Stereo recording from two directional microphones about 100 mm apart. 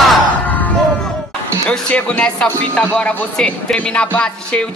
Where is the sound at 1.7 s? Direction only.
10° left (ahead or behind).